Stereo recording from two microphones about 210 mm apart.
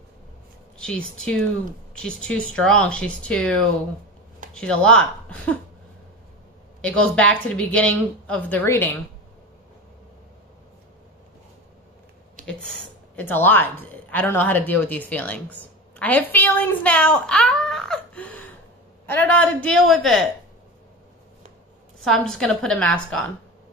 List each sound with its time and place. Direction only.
0.7 s speech: 5° left (ahead or behind)
6.8 s a woman's voice: 5° left (ahead or behind)
12.4 s a sound: 40° right (ahead or behind)
13.1 s speech: 10° left (ahead or behind)
22.0 s speech: centre (ahead or behind)